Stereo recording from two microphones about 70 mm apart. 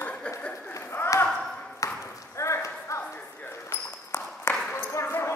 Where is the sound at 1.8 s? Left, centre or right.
Left.